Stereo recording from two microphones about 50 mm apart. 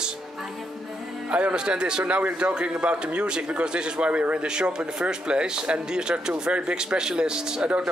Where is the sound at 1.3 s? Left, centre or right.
Right.